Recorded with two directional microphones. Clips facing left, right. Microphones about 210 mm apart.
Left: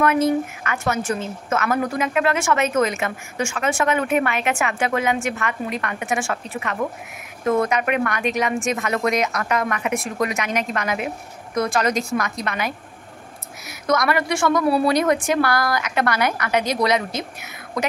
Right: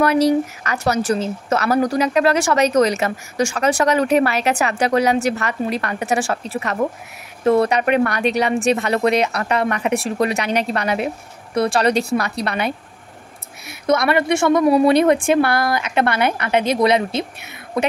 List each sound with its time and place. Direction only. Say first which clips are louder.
0.7 s a woman's voice: right 4 dB; 40° right (ahead or behind)